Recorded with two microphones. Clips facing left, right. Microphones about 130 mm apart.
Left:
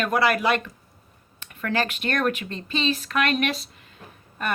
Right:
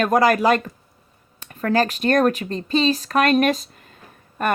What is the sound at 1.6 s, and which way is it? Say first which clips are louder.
A woman's voice: right 6 dB; 40° right (ahead or behind).